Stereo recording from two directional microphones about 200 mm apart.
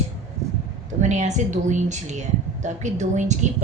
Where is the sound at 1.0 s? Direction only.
35° right (ahead or behind).